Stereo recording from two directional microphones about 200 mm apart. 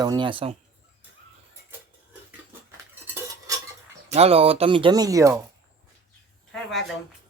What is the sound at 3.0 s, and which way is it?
Cutlery, 10° right (ahead or behind).